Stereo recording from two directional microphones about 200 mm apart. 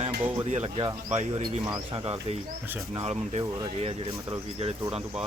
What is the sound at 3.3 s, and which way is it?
Speech, 30° right (ahead or behind).